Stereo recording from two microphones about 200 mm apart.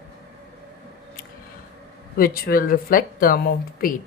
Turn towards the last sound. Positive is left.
turn(degrees=45)  # may be behind; listen again after turning